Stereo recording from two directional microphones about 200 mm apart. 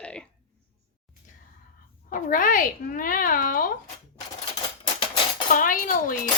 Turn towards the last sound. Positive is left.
turn(degrees=45)  # may be behind; listen again after turning